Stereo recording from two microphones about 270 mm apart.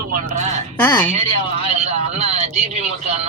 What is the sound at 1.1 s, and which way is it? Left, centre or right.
A man's voice, right.